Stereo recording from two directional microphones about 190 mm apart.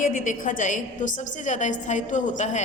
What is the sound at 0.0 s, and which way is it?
A woman's voice, 45° left (ahead or behind).